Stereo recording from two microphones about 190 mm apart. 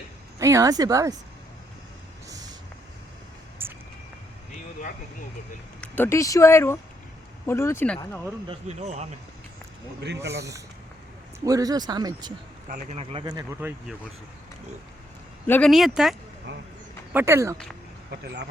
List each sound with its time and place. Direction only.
0.3 s speech: 15° right (ahead or behind)
3.6 s vehicle: 10° right (ahead or behind)
5.8 s speech: 10° left (ahead or behind)
8.4 s speech: 35° right (ahead or behind)
11.4 s speech: 20° right (ahead or behind)
12.6 s a man's voice: 45° right (ahead or behind)
13.0 s speech: 25° right (ahead or behind)
13.6 s speech: 10° right (ahead or behind)
15.4 s speech: 10° left (ahead or behind)
15.7 s speech: centre (ahead or behind)
16.5 s speech: 65° right (ahead or behind)
17.1 s speech: 10° right (ahead or behind)